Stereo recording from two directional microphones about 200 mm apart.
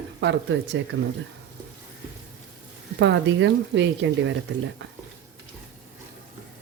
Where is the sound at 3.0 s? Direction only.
65° right (ahead or behind).